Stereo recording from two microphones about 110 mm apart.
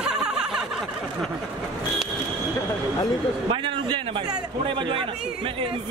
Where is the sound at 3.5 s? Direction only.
50° right (ahead or behind).